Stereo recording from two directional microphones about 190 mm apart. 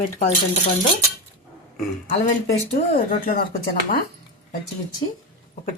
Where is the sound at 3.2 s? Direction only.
45° left (ahead or behind).